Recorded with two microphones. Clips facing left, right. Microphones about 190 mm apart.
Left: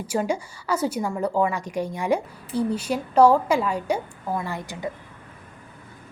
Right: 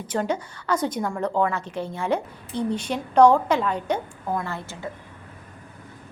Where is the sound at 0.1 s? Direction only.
10° left (ahead or behind).